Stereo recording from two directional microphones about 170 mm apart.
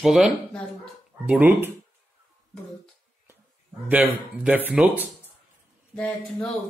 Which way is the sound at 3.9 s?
10° right (ahead or behind).